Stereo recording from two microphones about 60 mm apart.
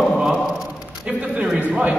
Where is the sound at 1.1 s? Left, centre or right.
Right.